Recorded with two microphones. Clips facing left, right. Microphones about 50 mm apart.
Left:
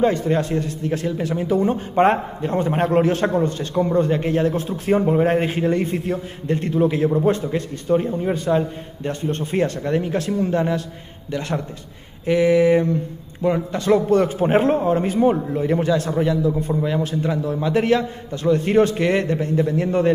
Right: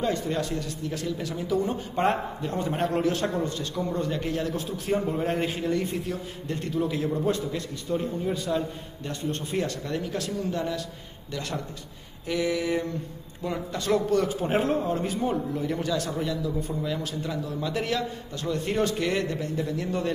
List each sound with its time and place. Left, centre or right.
0.0 s a man's voice: left